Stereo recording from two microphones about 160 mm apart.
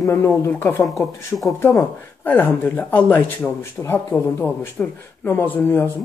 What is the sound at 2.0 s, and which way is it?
Speech, 10° left (ahead or behind).